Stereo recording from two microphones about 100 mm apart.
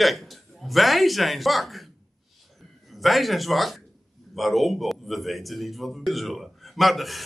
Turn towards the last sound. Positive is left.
turn(degrees=0)  # may be behind; listen again after turning